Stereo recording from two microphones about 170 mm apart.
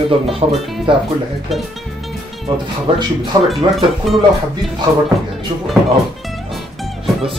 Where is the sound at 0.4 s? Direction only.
35° right (ahead or behind).